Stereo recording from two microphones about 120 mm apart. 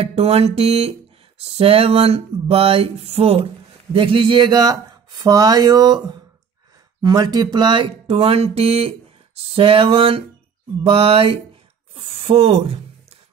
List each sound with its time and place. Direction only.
0.0 s a sound: 55° right (ahead or behind)
3.9 s speech: 45° right (ahead or behind)
7.0 s speech: 35° right (ahead or behind); by 12.7 s 55° right (ahead or behind)